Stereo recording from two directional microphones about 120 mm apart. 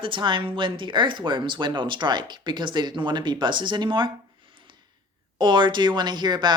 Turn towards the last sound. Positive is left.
turn(degrees=-40)  # may be behind; listen again after turning